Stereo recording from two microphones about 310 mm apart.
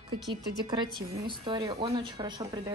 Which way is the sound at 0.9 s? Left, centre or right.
Centre.